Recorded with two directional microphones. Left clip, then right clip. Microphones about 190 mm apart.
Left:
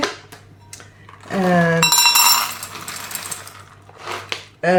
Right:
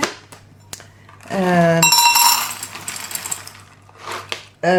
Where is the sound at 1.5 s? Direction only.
40° right (ahead or behind).